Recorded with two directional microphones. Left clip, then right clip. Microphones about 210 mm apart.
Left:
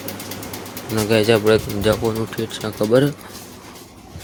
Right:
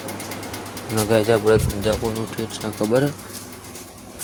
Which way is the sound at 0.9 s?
30° left (ahead or behind).